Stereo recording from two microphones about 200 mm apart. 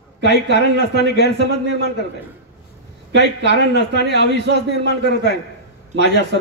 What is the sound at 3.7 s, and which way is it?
A man's voice, 55° left (ahead or behind).